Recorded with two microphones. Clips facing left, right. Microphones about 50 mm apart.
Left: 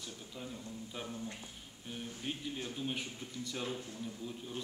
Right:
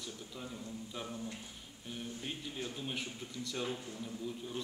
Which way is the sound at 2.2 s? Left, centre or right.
Centre.